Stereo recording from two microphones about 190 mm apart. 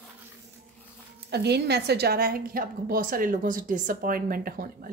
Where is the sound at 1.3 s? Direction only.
60° right (ahead or behind).